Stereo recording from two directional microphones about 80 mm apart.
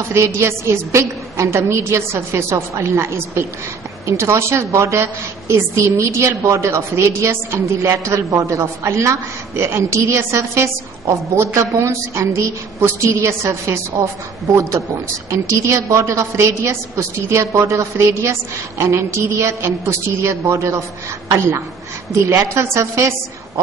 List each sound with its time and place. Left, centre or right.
0.1 s a woman's voice: right
22.2 s a woman's voice: right